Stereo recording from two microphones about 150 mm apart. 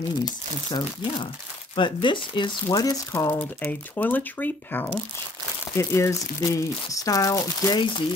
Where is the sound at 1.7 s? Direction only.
35° left (ahead or behind).